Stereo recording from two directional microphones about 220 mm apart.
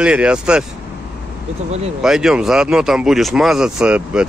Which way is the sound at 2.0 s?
Centre (ahead or behind).